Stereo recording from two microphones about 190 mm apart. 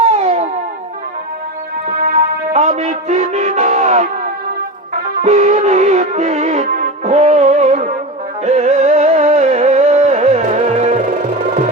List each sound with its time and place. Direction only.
0.0 s a sound: 35° right (ahead or behind)
2.5 s music: 35° right (ahead or behind)
5.2 s music: 35° right (ahead or behind)